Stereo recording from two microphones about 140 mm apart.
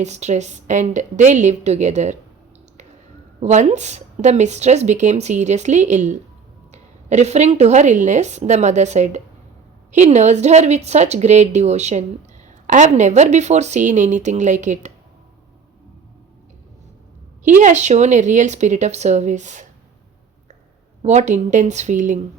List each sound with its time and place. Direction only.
0.0 s speech: 55° right (ahead or behind)
3.4 s a woman's voice: 55° right (ahead or behind)
17.4 s speech: 60° right (ahead or behind)
21.0 s speech: 55° right (ahead or behind)